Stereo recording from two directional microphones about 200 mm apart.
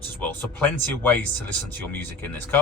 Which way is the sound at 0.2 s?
10° left (ahead or behind).